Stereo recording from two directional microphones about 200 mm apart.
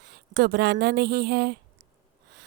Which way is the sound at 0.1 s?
55° right (ahead or behind).